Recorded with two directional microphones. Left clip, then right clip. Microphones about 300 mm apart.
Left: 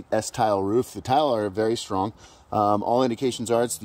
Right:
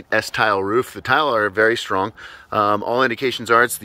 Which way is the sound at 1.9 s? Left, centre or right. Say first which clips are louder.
Right 6 dB; centre.